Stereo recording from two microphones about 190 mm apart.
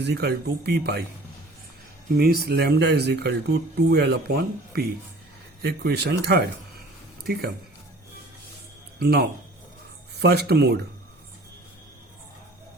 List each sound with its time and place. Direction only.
0.0 s speech: 60° right (ahead or behind)
2.1 s speech: 55° right (ahead or behind)
9.0 s speech: 55° right (ahead or behind)